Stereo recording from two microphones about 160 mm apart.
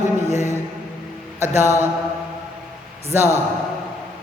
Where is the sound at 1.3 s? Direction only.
15° right (ahead or behind).